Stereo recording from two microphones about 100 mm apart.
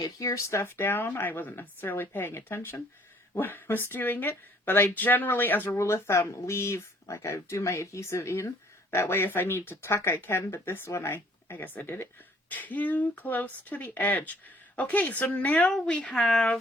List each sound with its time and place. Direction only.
0.0 s speech: 35° left (ahead or behind); by 16.6 s 10° left (ahead or behind)